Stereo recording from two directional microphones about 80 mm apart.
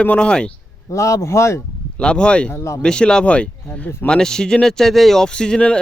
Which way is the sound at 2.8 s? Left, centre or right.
Centre.